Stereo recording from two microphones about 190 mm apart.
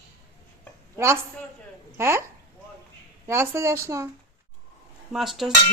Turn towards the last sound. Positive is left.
turn(degrees=0)  # may be behind; listen again after turning